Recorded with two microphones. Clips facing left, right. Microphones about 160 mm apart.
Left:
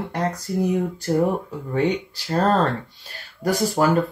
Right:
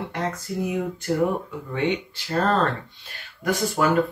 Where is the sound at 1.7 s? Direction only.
40° left (ahead or behind).